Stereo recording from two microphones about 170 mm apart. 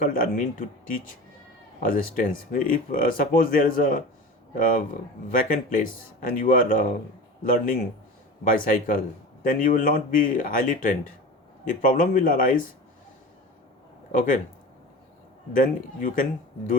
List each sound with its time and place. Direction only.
0.0 s a man's voice: 55° left (ahead or behind)
1.8 s a man's voice: 55° left (ahead or behind)
14.1 s a man's voice: 50° left (ahead or behind)
15.5 s a man's voice: 55° left (ahead or behind)